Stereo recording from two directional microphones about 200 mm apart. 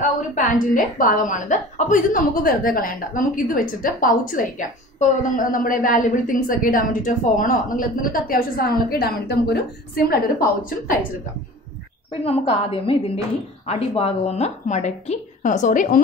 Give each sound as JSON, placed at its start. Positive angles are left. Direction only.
{"t": 0.5, "sound": "a woman's voice", "side_deg": 45}
{"t": 12.1, "sound": "a woman's voice", "side_deg": 30}